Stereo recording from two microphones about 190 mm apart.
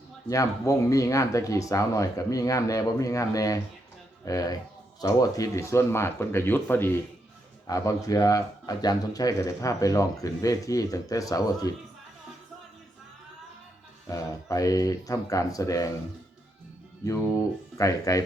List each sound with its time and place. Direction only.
0.3 s speech: 15° left (ahead or behind)
14.1 s speech: 15° left (ahead or behind)
17.7 s speech: 15° left (ahead or behind)